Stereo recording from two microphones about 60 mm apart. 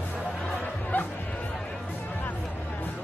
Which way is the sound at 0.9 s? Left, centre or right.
Left.